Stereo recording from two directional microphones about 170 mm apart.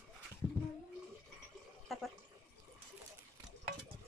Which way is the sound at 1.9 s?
Centre (ahead or behind).